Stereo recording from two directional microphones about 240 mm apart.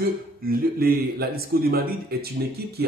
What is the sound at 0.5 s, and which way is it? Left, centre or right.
Speech, right.